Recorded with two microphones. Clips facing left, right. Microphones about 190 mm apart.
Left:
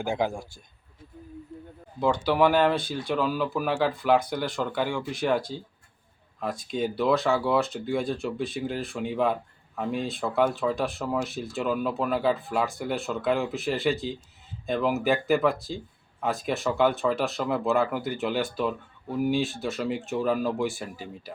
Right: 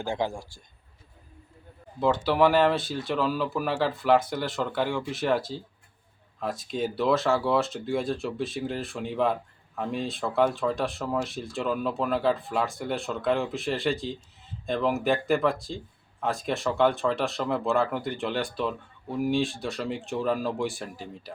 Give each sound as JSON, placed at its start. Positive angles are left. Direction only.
{"t": 0.0, "sound": "a man's voice", "side_deg": 15}
{"t": 2.0, "sound": "speech", "side_deg": 0}